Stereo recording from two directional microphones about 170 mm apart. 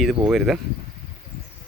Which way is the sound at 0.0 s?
5° right (ahead or behind).